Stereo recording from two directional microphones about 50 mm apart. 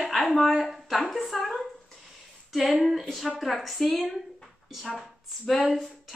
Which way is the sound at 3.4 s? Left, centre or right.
Centre.